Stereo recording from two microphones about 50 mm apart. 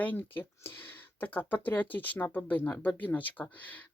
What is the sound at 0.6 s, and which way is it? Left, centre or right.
Speech, left.